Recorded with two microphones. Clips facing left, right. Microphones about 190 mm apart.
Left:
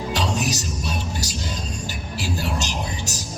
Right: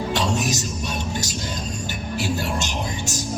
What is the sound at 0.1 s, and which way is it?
Music, 40° left (ahead or behind).